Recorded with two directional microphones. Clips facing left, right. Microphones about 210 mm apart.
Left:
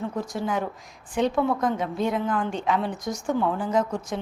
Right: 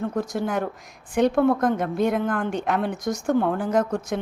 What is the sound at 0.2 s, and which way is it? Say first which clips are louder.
A woman's voice: right 2 dB; 60° right (ahead or behind).